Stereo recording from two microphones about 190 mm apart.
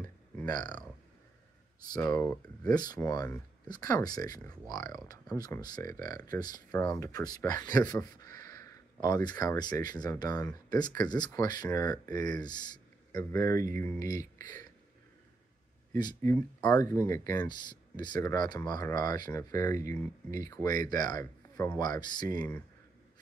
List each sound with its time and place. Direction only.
2.0 s speech: 15° left (ahead or behind)
15.9 s speech: 20° left (ahead or behind)